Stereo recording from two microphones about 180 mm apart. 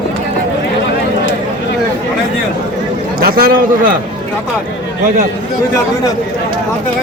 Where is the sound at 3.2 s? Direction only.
55° right (ahead or behind).